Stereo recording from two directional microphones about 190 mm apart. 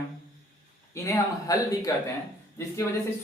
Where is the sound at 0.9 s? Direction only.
15° left (ahead or behind).